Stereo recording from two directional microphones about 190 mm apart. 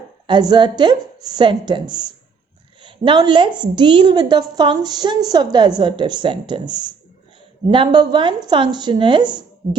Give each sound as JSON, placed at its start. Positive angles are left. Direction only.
{"t": 0.3, "sound": "a woman's voice", "side_deg": -25}